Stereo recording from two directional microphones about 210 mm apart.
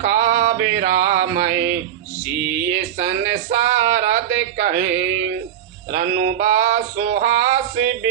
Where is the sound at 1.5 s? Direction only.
10° right (ahead or behind).